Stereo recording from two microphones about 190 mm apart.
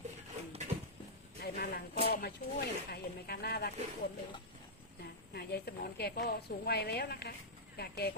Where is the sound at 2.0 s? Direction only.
55° left (ahead or behind).